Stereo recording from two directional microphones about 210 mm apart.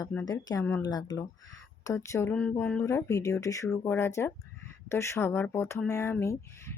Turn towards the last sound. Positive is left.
turn(degrees=15)  # may be behind; listen again after turning